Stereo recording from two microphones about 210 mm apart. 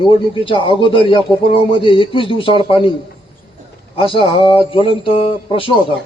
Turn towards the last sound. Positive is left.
turn(degrees=25)  # may be behind; listen again after turning